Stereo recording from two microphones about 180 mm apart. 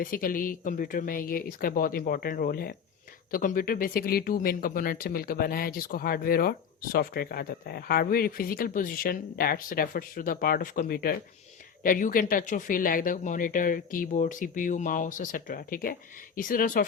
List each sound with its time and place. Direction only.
0.0 s speech: 50° left (ahead or behind)